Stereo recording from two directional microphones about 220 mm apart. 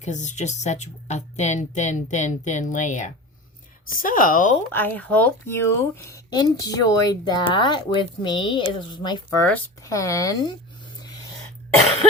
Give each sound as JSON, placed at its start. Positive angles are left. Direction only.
{"t": 0.0, "sound": "speech", "side_deg": 35}
{"t": 4.7, "sound": "speech", "side_deg": 10}